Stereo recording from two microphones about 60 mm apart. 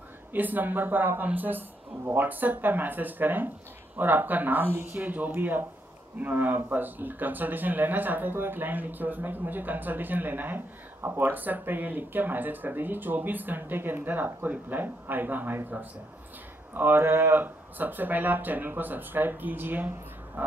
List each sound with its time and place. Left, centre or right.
0.3 s speech: right
16.7 s speech: right